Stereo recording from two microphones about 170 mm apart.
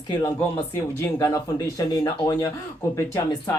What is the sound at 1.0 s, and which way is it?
Speech, 15° left (ahead or behind).